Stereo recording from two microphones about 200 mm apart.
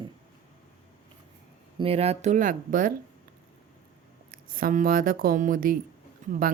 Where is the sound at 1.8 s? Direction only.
30° right (ahead or behind).